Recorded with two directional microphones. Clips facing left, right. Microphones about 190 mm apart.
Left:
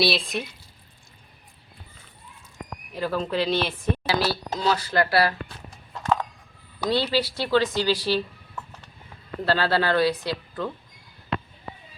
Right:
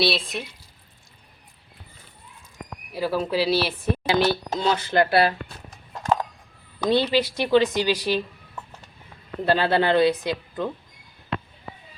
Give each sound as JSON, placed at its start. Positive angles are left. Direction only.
{"t": 0.0, "sound": "speech", "side_deg": 0}
{"t": 2.9, "sound": "speech", "side_deg": -10}
{"t": 4.1, "sound": "speech", "side_deg": -25}
{"t": 6.8, "sound": "speech", "side_deg": -20}